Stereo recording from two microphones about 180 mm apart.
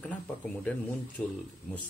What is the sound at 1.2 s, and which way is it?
Speech, 10° left (ahead or behind).